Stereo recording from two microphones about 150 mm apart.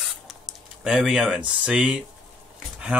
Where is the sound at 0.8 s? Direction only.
5° right (ahead or behind).